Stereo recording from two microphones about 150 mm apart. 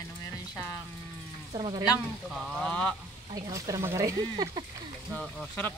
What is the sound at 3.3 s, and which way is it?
Speech, 25° right (ahead or behind).